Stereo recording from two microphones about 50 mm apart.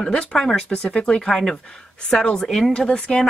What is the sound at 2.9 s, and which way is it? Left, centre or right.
Speech, centre.